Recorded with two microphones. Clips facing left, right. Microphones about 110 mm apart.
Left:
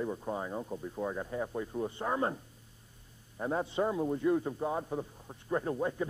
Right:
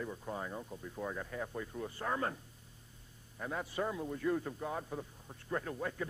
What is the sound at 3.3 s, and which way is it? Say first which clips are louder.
A man's voice: left 6 dB; 30° left (ahead or behind).